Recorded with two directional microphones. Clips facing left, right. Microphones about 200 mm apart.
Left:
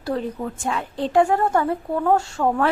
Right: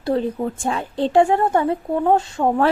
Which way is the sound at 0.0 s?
30° right (ahead or behind).